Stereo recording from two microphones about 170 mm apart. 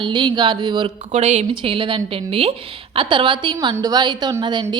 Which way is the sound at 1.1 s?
40° right (ahead or behind).